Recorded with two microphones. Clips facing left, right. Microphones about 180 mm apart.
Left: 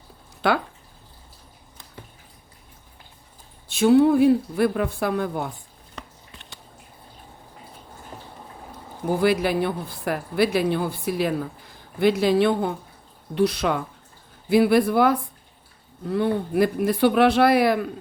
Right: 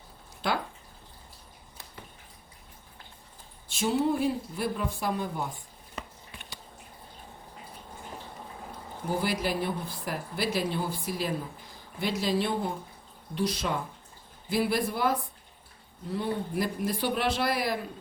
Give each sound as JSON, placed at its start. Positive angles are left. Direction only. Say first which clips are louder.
{"t": 3.7, "sound": "speech", "louder": "left 11 dB", "side_deg": 65}
{"t": 6.0, "sound": "a sound", "louder": "even", "side_deg": -5}
{"t": 9.2, "sound": "speech", "louder": "left 11 dB", "side_deg": 65}